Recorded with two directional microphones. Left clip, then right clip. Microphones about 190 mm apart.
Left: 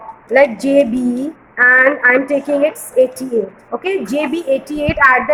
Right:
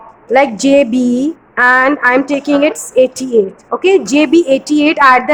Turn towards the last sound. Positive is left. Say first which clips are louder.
# right 4 dB
turn(degrees=-55)  # may be behind; listen again after turning